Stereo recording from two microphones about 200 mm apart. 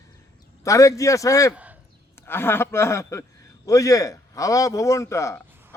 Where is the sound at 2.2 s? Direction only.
10° left (ahead or behind).